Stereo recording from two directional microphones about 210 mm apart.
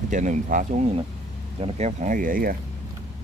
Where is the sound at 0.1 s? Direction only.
35° right (ahead or behind).